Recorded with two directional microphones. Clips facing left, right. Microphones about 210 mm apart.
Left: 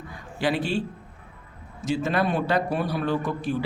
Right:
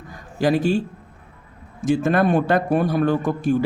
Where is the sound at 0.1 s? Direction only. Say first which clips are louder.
Right 6 dB; 45° right (ahead or behind).